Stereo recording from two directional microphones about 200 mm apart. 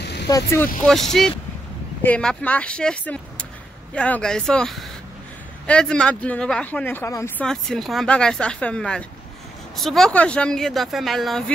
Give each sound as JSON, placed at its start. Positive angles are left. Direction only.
{"t": 0.0, "sound": "vehicle", "side_deg": 55}
{"t": 0.3, "sound": "speech", "side_deg": 15}
{"t": 0.8, "sound": "speech", "side_deg": 0}